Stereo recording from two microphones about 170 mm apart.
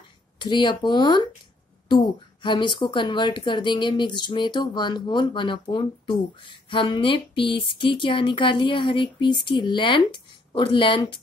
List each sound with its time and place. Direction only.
0.4 s speech: 25° left (ahead or behind)